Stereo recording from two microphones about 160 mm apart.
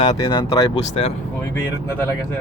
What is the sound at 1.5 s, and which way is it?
Speech, 15° left (ahead or behind).